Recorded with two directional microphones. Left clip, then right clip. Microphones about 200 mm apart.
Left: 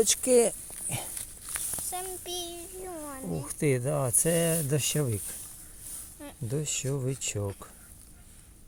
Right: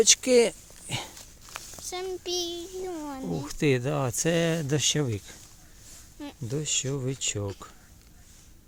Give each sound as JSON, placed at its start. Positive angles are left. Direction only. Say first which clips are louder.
{"t": 0.0, "sound": "speech", "louder": "right 3 dB", "side_deg": -15}
{"t": 1.5, "sound": "a sound", "louder": "left 1 dB", "side_deg": 5}
{"t": 1.9, "sound": "child singing", "louder": "right 4 dB", "side_deg": -60}
{"t": 2.5, "sound": "a child's voice", "louder": "right 6 dB", "side_deg": -45}
{"t": 3.4, "sound": "speech", "louder": "right 3 dB", "side_deg": -20}
{"t": 6.5, "sound": "speech", "louder": "right 3 dB", "side_deg": -10}